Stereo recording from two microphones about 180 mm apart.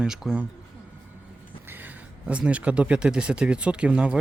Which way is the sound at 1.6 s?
10° right (ahead or behind).